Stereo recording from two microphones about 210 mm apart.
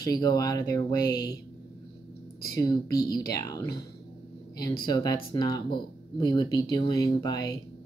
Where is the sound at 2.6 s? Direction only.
15° left (ahead or behind).